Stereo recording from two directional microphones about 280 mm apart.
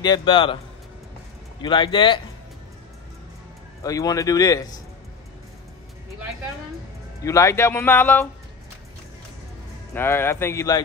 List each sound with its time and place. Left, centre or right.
0.0 s speech: centre
1.6 s speech: centre
3.8 s speech: centre
7.2 s speech: centre
9.9 s speech: centre